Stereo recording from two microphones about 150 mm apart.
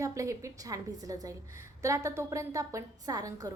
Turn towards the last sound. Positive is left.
turn(degrees=-25)  # may be behind; listen again after turning